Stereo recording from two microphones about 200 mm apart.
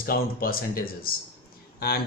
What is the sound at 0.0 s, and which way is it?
Speech, 50° left (ahead or behind).